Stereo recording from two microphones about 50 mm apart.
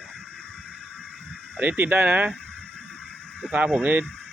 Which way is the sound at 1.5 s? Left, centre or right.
Right.